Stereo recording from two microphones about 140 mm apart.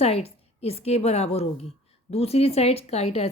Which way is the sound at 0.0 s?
45° left (ahead or behind).